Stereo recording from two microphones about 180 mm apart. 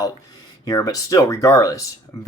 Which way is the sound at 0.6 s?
20° left (ahead or behind).